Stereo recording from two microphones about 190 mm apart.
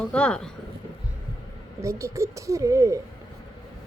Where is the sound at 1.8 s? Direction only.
15° right (ahead or behind).